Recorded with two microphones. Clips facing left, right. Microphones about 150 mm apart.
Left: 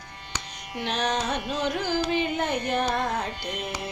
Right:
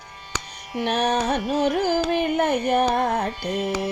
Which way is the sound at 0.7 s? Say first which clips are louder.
Right 5 dB; 55° right (ahead or behind).